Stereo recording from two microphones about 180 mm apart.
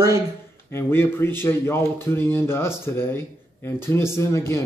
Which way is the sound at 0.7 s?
15° left (ahead or behind).